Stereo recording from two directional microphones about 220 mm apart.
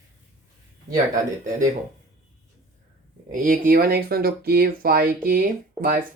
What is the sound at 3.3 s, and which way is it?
Speech, 40° right (ahead or behind).